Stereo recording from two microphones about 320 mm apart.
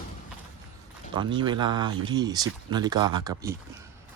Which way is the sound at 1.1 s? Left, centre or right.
Centre.